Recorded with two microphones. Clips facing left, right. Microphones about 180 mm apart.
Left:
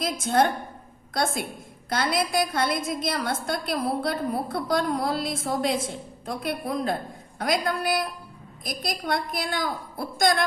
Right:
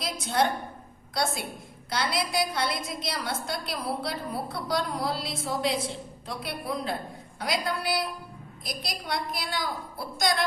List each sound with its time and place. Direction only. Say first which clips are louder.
0.0 s a woman's voice: left 4 dB; 50° left (ahead or behind)